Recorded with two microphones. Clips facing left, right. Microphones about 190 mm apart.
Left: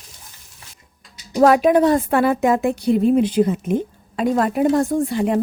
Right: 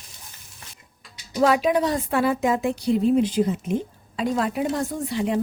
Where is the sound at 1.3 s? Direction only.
50° left (ahead or behind).